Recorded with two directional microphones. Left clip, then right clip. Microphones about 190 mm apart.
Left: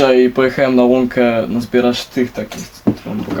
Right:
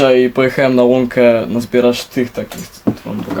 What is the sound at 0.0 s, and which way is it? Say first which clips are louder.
Speech: even; 35° right (ahead or behind).